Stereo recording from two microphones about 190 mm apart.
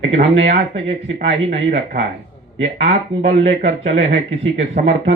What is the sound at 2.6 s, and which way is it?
Speech, 35° right (ahead or behind).